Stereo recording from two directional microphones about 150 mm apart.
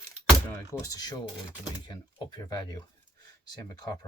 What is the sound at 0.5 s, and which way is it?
Speech, 20° left (ahead or behind).